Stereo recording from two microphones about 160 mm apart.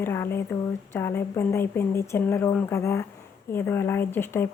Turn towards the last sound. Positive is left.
turn(degrees=15)  # may be behind; listen again after turning